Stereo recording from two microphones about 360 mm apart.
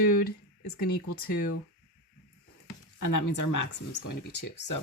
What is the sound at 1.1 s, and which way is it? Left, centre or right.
Speech, left.